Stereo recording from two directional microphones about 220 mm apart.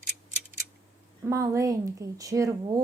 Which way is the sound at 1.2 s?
15° right (ahead or behind).